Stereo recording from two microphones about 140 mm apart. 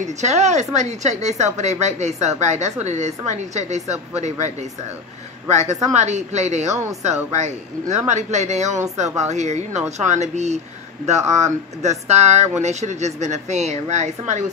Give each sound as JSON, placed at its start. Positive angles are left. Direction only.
{"t": 0.0, "sound": "speech", "side_deg": -55}
{"t": 6.7, "sound": "speech", "side_deg": -20}
{"t": 7.3, "sound": "speech", "side_deg": -55}